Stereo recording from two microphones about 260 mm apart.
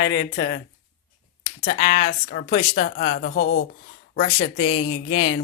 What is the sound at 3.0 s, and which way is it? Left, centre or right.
Speech, left.